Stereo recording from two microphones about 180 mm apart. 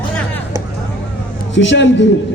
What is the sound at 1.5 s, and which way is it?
Speech, 90° left.